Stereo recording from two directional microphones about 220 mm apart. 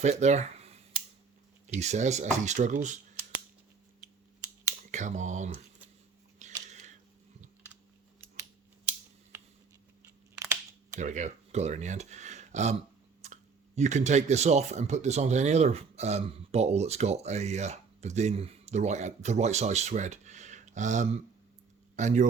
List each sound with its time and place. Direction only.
0.0 s speech: 30° right (ahead or behind)
4.9 s speech: 35° right (ahead or behind)
6.4 s a sound: 30° right (ahead or behind)
9.3 s a sound: 10° right (ahead or behind)
10.3 s crunch: 10° right (ahead or behind)
10.9 s speech: 35° right (ahead or behind)